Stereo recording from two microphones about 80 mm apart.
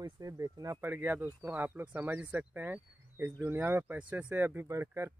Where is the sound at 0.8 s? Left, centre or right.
Right.